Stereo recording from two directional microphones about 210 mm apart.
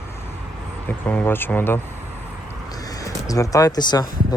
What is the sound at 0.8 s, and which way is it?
Speech, 5° left (ahead or behind).